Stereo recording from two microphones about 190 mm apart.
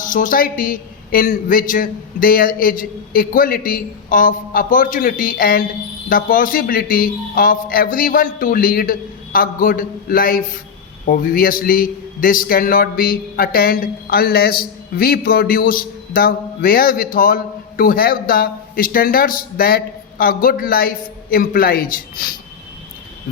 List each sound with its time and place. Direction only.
0.0 s a man's voice: 45° left (ahead or behind)